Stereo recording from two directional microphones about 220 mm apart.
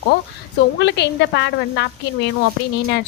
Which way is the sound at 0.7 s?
50° left (ahead or behind).